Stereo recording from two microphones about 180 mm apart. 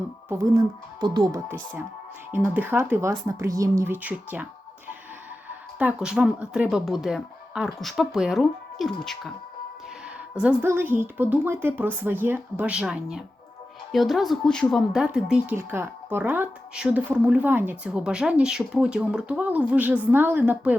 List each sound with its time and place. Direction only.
0.3 s speech: 20° right (ahead or behind)
2.3 s speech: 10° right (ahead or behind)
5.8 s speech: 5° right (ahead or behind)
10.4 s speech: 10° right (ahead or behind)